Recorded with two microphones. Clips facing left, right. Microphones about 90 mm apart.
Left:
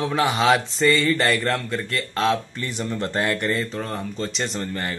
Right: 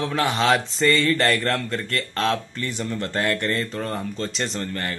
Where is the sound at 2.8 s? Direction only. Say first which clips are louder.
Left 1 dB; 20° left (ahead or behind).